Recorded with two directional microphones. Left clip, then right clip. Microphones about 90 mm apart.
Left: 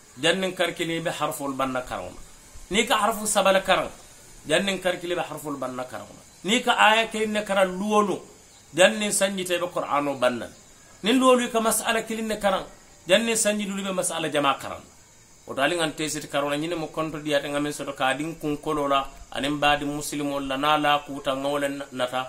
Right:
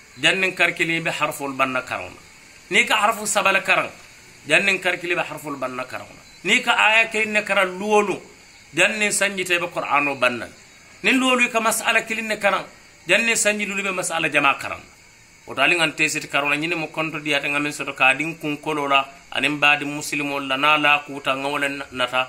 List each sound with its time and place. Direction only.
0.2 s a man's voice: 40° left (ahead or behind)
15.5 s a man's voice: 35° left (ahead or behind)